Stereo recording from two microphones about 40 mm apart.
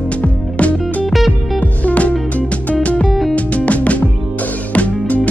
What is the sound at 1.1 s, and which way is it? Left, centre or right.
Music, centre.